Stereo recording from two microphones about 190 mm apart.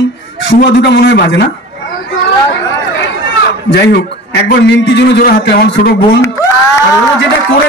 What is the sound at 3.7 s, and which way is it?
A man's voice, 60° left (ahead or behind).